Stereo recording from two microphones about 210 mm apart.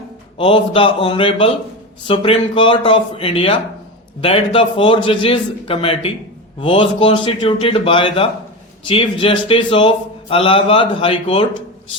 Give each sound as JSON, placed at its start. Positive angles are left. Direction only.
{"t": 0.3, "sound": "a man's voice", "side_deg": 25}